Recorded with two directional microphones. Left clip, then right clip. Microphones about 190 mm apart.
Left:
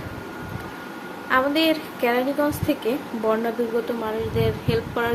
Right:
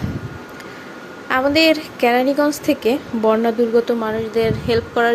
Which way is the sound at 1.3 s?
35° right (ahead or behind).